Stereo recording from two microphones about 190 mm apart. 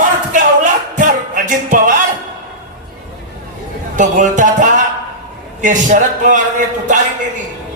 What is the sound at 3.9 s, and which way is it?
Speech, 40° right (ahead or behind).